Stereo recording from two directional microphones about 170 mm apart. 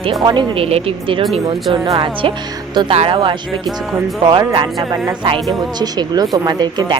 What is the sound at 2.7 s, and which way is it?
Speech, 30° right (ahead or behind).